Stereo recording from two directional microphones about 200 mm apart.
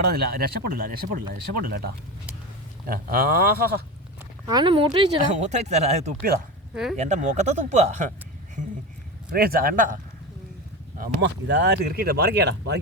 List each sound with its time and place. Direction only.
0.1 s speech: 50° right (ahead or behind)
4.4 s speech: 20° right (ahead or behind)
9.3 s speech: 50° right (ahead or behind)
11.2 s speech: 60° right (ahead or behind)